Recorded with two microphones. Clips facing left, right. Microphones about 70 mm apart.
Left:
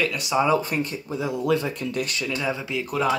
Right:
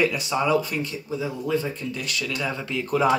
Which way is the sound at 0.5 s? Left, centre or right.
Left.